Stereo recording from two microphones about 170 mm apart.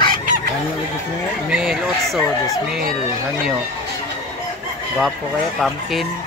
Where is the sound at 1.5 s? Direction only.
5° right (ahead or behind).